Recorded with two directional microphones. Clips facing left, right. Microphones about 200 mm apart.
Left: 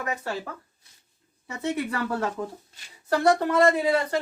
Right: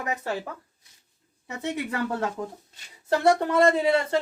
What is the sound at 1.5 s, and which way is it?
Speech, 20° right (ahead or behind).